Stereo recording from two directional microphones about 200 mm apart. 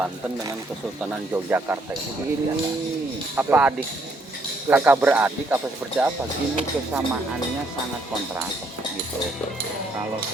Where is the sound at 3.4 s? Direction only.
10° right (ahead or behind).